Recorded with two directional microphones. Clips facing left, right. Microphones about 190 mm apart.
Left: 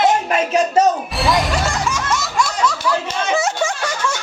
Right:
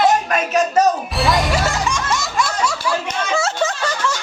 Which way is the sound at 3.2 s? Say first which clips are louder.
Left 1 dB; 20° left (ahead or behind).